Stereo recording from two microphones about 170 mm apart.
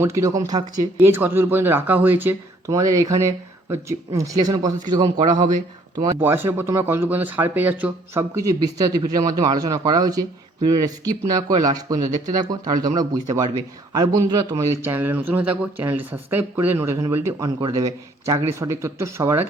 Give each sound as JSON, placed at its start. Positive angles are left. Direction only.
{"t": 0.0, "sound": "speech", "side_deg": -15}
{"t": 6.1, "sound": "speech", "side_deg": -15}
{"t": 13.9, "sound": "speech", "side_deg": -25}